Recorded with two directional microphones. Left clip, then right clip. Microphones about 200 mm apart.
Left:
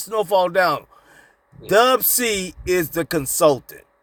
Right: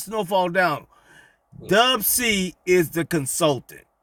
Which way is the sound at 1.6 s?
10° right (ahead or behind).